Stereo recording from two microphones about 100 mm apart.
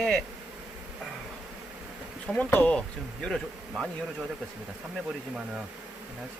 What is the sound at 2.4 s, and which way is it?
Speech, 15° left (ahead or behind).